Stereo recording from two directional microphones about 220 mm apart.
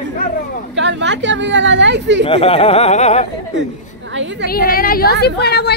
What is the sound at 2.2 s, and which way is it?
Speech, 25° left (ahead or behind).